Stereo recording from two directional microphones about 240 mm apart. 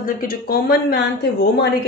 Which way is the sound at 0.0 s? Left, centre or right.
Left.